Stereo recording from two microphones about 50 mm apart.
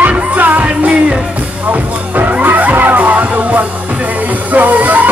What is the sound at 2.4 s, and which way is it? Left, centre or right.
Music, right.